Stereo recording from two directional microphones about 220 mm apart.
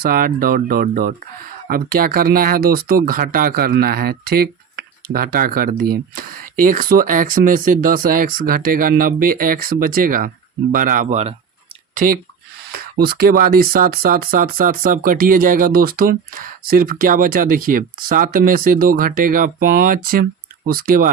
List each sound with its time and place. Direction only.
0.0 s speech: 40° right (ahead or behind)